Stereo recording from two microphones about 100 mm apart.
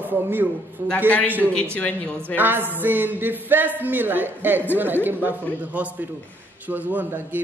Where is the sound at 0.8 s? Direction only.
15° left (ahead or behind).